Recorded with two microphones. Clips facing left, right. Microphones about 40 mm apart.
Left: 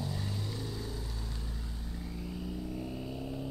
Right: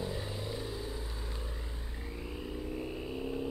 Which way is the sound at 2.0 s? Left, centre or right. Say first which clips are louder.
Even; right.